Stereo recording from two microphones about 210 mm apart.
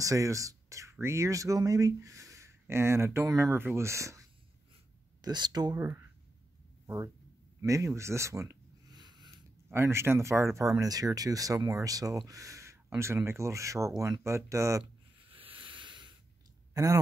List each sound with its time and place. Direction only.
0.0 s speech: 15° right (ahead or behind)
7.6 s a sound: 15° right (ahead or behind)
9.7 s speech: 10° right (ahead or behind)
15.1 s sanding: 25° right (ahead or behind)
16.7 s speech: 15° right (ahead or behind)